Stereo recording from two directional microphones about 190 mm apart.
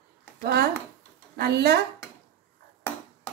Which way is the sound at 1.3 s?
60° right (ahead or behind).